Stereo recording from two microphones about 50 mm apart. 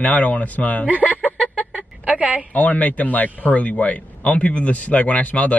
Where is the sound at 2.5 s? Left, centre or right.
Left.